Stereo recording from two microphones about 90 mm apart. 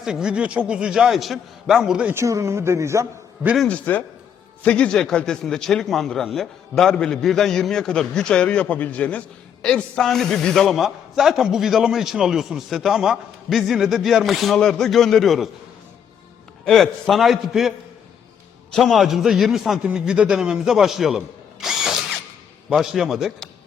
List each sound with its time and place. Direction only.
0.0 s a man's voice: 10° right (ahead or behind)
2.1 s a man's voice: 35° right (ahead or behind)
3.7 s a man's voice: 20° left (ahead or behind); by 15.4 s centre (ahead or behind)
16.6 s a man's voice: 5° left (ahead or behind)